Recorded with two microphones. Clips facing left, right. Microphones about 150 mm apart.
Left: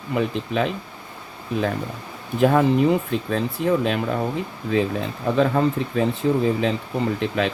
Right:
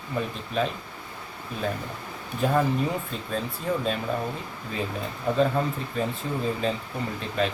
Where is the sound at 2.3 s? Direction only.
90° left.